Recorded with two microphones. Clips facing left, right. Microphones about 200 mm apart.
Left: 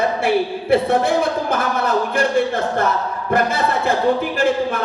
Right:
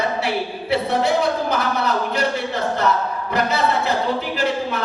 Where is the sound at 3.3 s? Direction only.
50° left (ahead or behind).